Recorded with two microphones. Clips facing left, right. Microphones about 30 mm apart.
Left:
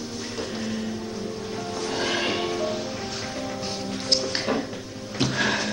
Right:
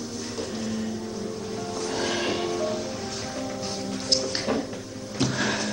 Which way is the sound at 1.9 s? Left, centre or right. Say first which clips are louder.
Left 2 dB; left.